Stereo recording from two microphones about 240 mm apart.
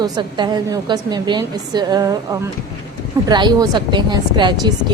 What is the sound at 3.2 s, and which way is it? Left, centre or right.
A woman's voice, centre.